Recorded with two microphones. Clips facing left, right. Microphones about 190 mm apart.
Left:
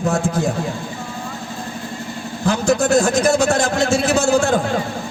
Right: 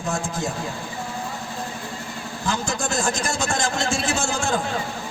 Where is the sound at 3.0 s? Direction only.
60° left (ahead or behind).